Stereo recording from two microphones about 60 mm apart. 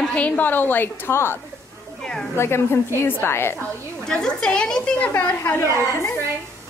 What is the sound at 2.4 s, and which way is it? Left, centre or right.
A woman's voice, left.